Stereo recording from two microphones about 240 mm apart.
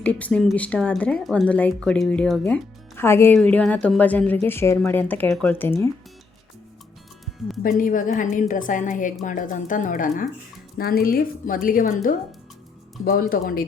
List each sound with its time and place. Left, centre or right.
0.0 s speech: centre
7.6 s a woman's voice: left
13.1 s a woman's voice: left